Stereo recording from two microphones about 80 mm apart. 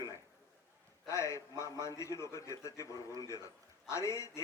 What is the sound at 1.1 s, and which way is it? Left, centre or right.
A man's voice, left.